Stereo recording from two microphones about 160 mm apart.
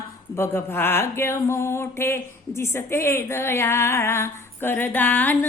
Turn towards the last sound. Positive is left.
turn(degrees=10)  # may be behind; listen again after turning